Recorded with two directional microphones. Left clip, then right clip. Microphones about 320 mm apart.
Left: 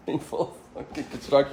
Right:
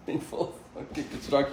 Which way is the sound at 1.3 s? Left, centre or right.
Left.